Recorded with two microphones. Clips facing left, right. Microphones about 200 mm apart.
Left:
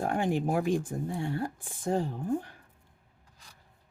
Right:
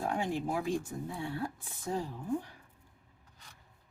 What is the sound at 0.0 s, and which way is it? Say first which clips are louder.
Speech: left 5 dB; 55° left (ahead or behind).